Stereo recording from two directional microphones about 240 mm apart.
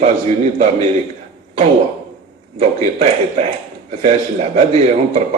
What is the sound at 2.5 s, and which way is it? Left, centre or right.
A man's voice, right.